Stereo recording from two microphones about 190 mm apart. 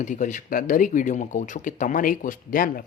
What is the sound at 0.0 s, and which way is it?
Speech, 40° left (ahead or behind).